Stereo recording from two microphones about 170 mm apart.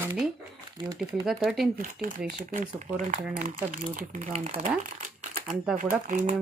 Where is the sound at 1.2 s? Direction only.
Centre (ahead or behind).